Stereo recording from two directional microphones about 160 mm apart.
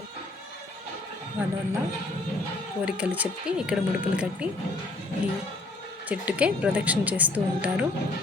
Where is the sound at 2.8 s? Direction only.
10° right (ahead or behind).